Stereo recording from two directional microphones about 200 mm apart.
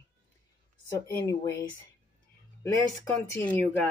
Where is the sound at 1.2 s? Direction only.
15° left (ahead or behind).